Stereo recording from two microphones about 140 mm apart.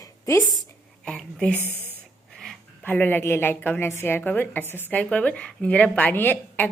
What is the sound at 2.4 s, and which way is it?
A woman's voice, 5° left (ahead or behind).